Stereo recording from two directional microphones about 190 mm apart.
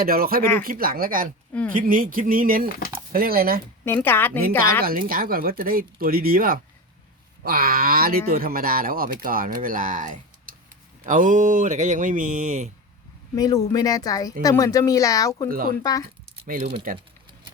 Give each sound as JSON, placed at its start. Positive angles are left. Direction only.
{"t": 0.0, "sound": "speech", "side_deg": -50}
{"t": 3.8, "sound": "speech", "side_deg": 10}
{"t": 4.8, "sound": "speech", "side_deg": -50}
{"t": 13.3, "sound": "a woman's voice", "side_deg": 20}
{"t": 15.4, "sound": "speech", "side_deg": -50}
{"t": 15.8, "sound": "a woman's voice", "side_deg": 20}
{"t": 16.5, "sound": "speech", "side_deg": -50}